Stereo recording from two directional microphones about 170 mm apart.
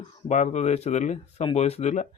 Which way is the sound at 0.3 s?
45° left (ahead or behind).